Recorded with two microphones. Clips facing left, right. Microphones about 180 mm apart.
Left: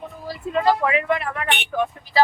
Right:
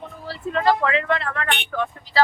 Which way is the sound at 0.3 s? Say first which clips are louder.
Left 1 dB; 15° left (ahead or behind).